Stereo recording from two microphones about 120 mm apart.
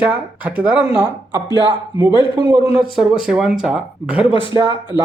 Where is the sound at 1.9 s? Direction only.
45° left (ahead or behind).